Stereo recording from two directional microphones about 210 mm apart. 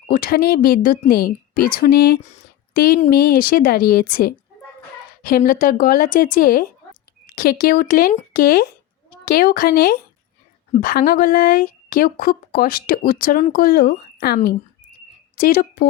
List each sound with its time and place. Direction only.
0.1 s a woman's voice: 45° left (ahead or behind)